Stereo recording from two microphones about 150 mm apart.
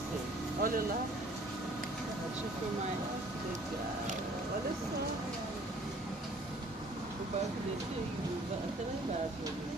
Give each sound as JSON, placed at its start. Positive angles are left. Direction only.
{"t": 0.6, "sound": "speech", "side_deg": -70}